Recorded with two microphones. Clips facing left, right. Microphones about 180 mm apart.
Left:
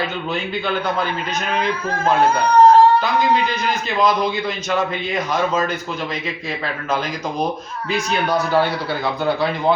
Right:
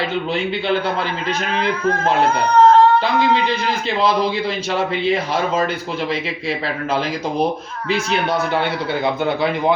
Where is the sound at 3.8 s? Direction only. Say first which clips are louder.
Even; 30° right (ahead or behind).